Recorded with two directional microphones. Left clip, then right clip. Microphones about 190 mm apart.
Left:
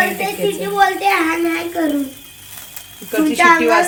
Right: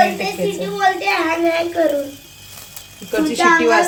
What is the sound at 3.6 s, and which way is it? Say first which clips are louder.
Speech: even; centre (ahead or behind).